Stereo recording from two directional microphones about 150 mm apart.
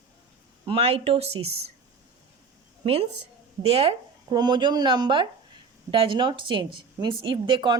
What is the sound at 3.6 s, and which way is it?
Speech, 40° right (ahead or behind).